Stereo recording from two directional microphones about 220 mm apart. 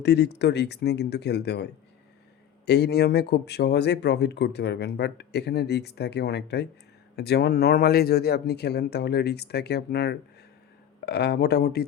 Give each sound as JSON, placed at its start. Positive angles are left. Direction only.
{"t": 0.0, "sound": "speech", "side_deg": 50}